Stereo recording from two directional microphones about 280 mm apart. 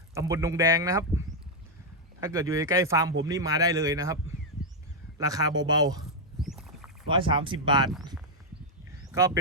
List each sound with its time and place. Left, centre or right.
0.1 s speech: centre
2.2 s speech: centre
6.4 s a sound: centre
7.1 s speech: centre
9.1 s speech: centre